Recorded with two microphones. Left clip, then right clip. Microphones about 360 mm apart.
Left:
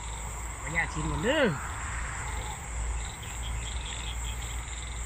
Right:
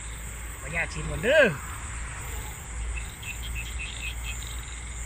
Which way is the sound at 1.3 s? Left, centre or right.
Right.